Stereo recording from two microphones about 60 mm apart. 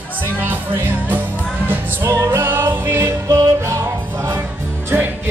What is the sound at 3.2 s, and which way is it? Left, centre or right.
Music, right.